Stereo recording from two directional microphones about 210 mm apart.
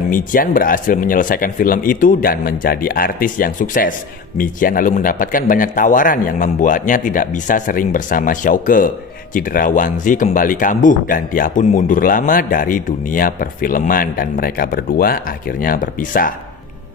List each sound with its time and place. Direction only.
0.1 s a man's voice: 40° left (ahead or behind)